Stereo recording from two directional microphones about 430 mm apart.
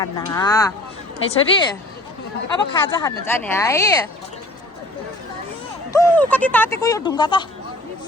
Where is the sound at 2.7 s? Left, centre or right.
Centre.